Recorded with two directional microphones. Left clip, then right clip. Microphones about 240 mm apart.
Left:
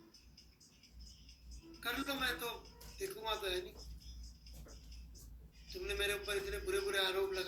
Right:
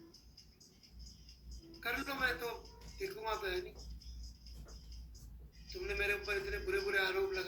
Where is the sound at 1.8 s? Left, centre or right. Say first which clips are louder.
Right 2 dB; centre.